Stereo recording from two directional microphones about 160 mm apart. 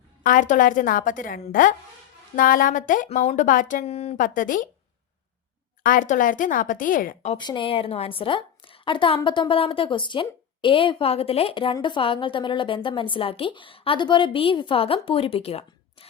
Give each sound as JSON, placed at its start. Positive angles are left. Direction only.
{"t": 0.2, "sound": "a woman's voice", "side_deg": 55}
{"t": 4.2, "sound": "a woman's voice", "side_deg": 55}
{"t": 5.8, "sound": "a woman's voice", "side_deg": 55}
{"t": 7.3, "sound": "a woman's voice", "side_deg": 30}